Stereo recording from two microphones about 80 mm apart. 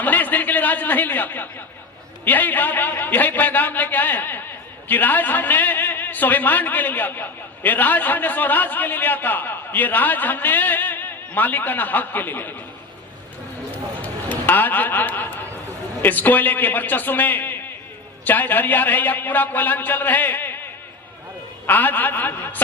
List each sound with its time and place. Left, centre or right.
0.0 s a sound: left
2.2 s a man's voice: left
14.0 s a man's voice: left
21.7 s a man's voice: left